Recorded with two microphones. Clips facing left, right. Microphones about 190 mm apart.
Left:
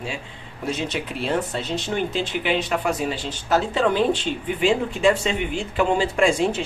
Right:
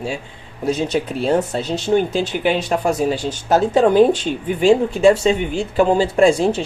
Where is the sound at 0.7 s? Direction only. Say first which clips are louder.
Right 7 dB; 40° right (ahead or behind).